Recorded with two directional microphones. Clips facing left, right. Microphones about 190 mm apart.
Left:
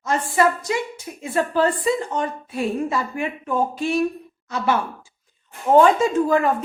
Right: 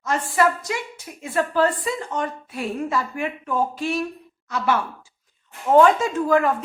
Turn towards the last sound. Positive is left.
turn(degrees=25)  # may be behind; listen again after turning